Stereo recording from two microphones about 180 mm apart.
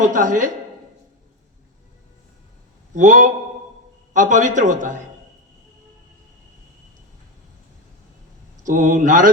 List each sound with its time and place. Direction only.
0.0 s a man's voice: 45° right (ahead or behind)
2.9 s a man's voice: 45° right (ahead or behind)
8.6 s a man's voice: 45° right (ahead or behind)